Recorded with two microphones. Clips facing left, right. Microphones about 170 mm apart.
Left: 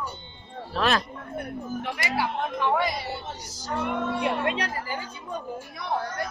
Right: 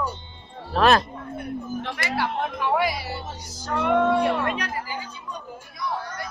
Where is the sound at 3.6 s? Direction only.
60° right (ahead or behind).